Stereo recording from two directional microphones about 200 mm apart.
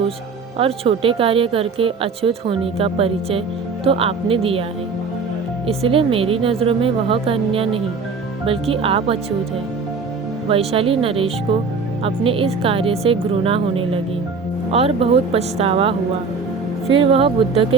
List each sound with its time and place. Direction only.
0.6 s speech: 25° right (ahead or behind)
5.6 s speech: 25° right (ahead or behind)
10.5 s speech: 30° right (ahead or behind)